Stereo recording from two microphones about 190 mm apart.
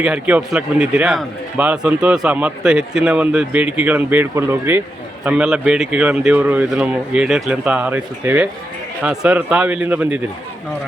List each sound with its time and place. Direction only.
0.0 s a man's voice: 5° right (ahead or behind)